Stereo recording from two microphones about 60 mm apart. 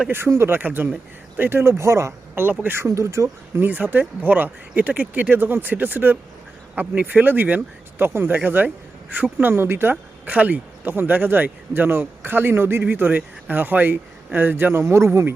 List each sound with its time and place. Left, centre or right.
0.3 s speech: right
0.6 s speech: right
2.3 s speech: right
2.7 s speech: right
3.6 s speech: right
10.2 s speech: right